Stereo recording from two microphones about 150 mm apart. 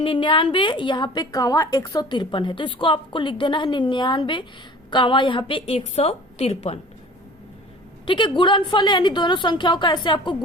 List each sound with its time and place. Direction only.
0.0 s a woman's voice: 35° left (ahead or behind)
8.0 s a woman's voice: 30° left (ahead or behind)